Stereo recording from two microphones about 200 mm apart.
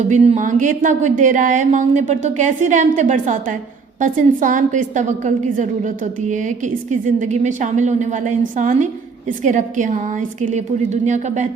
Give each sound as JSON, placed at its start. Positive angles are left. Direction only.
{"t": 0.0, "sound": "speech", "side_deg": -35}